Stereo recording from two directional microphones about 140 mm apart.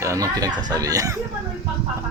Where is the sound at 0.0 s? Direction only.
20° right (ahead or behind).